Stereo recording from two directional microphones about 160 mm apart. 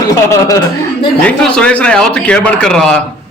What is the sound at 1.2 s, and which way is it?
A man's voice, 5° left (ahead or behind).